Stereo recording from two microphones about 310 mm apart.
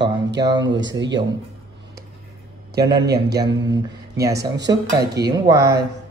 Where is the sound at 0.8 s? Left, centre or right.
Right.